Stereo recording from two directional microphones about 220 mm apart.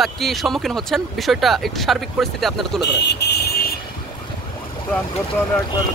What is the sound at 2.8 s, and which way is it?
Speech, 50° left (ahead or behind).